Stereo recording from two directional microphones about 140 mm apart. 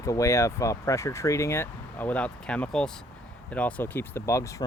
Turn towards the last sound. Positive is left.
turn(degrees=20)  # may be behind; listen again after turning